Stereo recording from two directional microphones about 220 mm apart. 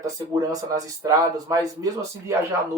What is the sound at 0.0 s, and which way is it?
Speech, 15° right (ahead or behind).